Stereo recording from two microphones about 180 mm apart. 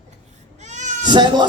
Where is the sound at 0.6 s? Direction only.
40° right (ahead or behind).